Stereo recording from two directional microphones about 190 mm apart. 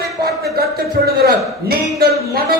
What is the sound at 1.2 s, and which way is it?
A man's voice, 55° right (ahead or behind).